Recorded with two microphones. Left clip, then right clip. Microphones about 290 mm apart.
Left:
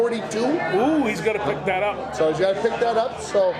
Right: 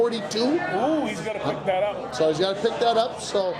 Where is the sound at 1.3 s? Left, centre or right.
Left.